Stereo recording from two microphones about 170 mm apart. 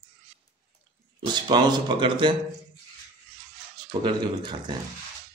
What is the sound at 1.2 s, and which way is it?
A man's voice, 25° right (ahead or behind).